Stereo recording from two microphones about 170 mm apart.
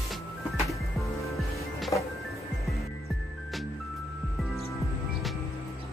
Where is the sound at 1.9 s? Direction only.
20° left (ahead or behind).